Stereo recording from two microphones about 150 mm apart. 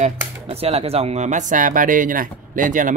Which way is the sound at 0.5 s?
40° right (ahead or behind).